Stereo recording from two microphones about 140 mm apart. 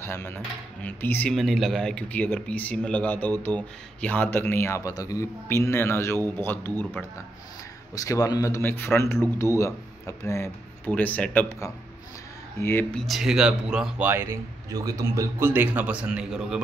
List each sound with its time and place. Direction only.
0.0 s speech: 15° left (ahead or behind)
1.3 s speech: centre (ahead or behind)
7.9 s speech: 25° left (ahead or behind)
12.5 s speech: 15° left (ahead or behind)
12.9 s speech: centre (ahead or behind)